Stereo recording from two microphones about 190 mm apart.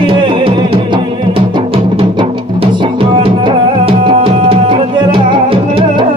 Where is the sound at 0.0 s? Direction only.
25° right (ahead or behind).